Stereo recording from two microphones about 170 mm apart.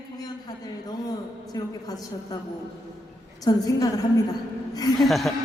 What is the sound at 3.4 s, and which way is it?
Music, 20° left (ahead or behind).